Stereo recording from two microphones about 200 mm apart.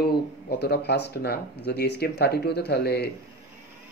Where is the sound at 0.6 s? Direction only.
55° left (ahead or behind).